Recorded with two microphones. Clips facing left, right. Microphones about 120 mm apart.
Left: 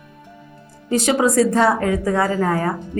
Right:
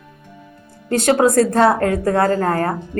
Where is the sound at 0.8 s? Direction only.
60° right (ahead or behind).